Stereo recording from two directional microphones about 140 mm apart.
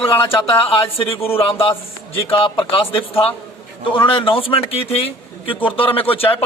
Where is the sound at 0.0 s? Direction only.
40° left (ahead or behind).